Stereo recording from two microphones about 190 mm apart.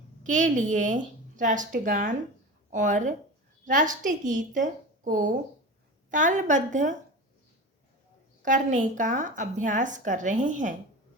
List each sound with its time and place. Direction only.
0.2 s a woman's voice: 40° right (ahead or behind)
8.4 s a woman's voice: 40° right (ahead or behind)